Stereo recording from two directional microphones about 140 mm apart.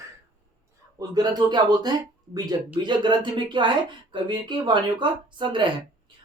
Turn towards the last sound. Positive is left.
turn(degrees=-35)  # may be behind; listen again after turning